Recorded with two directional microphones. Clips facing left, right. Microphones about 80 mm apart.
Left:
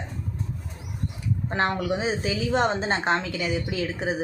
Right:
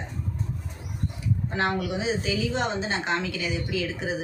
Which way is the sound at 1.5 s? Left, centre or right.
Left.